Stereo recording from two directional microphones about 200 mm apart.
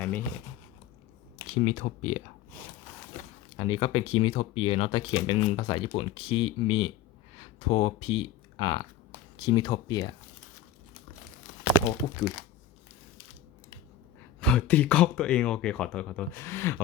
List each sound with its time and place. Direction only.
1.6 s speech: 35° left (ahead or behind)
3.6 s speech: 25° left (ahead or behind)
11.9 s speech: 15° left (ahead or behind)
14.4 s speech: 5° left (ahead or behind)